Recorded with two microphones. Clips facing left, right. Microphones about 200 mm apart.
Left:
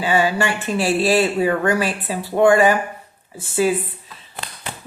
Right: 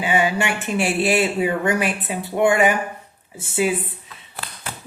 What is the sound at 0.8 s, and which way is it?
Speech, 30° left (ahead or behind).